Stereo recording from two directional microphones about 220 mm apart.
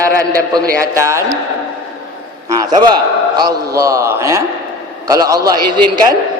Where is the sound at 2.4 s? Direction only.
15° right (ahead or behind).